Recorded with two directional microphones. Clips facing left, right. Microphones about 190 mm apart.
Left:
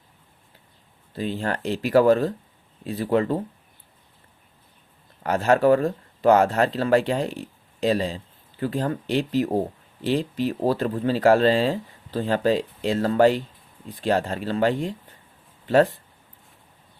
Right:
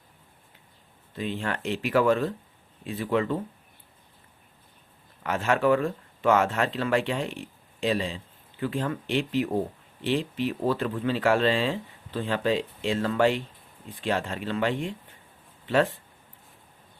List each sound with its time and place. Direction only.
1.1 s speech: 35° left (ahead or behind)
5.2 s speech: 40° left (ahead or behind)